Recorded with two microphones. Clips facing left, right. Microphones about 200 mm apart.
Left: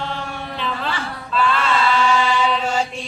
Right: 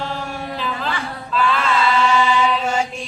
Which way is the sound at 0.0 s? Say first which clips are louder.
Right 1 dB; centre (ahead or behind).